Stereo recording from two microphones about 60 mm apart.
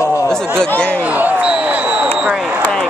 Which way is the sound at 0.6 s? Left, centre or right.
Left.